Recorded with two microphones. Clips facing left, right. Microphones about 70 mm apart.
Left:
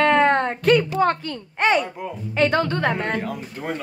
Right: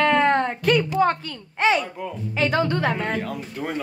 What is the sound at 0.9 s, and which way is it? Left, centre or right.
Speech, centre.